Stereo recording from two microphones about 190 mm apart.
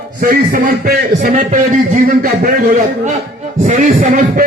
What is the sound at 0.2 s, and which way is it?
A man's voice, 50° right (ahead or behind).